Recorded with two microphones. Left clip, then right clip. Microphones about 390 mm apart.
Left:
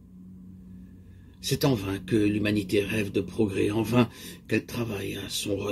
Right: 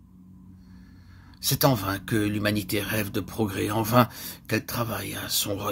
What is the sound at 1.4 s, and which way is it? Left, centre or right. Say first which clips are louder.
Speech: right 3 dB; right.